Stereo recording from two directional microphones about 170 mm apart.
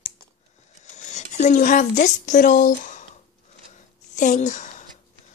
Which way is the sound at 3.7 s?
45° left (ahead or behind).